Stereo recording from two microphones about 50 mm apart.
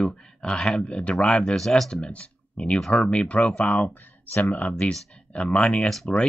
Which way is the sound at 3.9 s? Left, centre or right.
Left.